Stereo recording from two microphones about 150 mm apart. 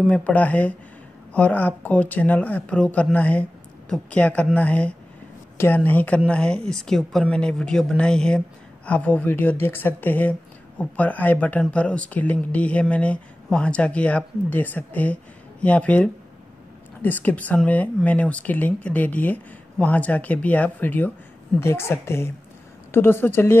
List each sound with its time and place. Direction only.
0.0 s speech: 10° left (ahead or behind)